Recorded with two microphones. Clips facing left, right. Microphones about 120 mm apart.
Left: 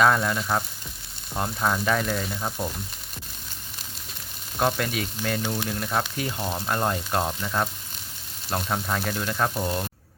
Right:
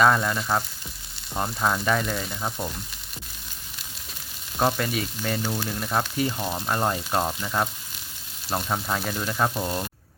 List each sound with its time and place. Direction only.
0.0 s frying: centre (ahead or behind)
4.5 s frying: 5° right (ahead or behind)